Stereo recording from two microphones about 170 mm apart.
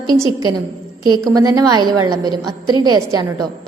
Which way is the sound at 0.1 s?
25° right (ahead or behind).